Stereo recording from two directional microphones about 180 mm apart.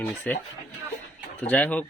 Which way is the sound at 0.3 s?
10° left (ahead or behind).